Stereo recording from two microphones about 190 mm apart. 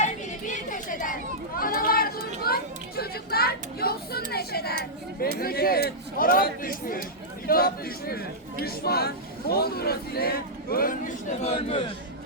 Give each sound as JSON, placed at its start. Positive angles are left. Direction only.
{"t": 0.0, "sound": "chatter", "side_deg": 40}
{"t": 4.3, "sound": "a man's voice", "side_deg": 55}
{"t": 11.5, "sound": "a man's voice", "side_deg": 30}